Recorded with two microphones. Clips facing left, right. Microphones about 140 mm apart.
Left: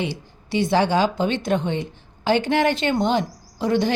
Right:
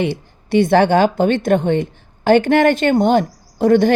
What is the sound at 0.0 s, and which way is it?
A woman's voice, 55° right (ahead or behind).